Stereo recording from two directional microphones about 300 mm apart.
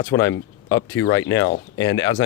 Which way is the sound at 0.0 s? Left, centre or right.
Centre.